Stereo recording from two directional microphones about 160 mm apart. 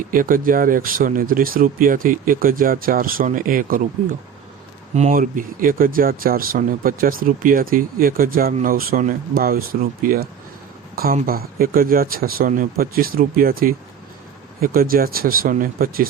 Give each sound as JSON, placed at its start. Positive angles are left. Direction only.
{"t": 0.1, "sound": "speech", "side_deg": -60}
{"t": 5.1, "sound": "speech", "side_deg": -60}